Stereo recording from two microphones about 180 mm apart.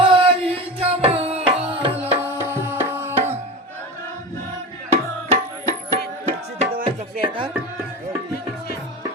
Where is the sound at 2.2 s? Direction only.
15° right (ahead or behind).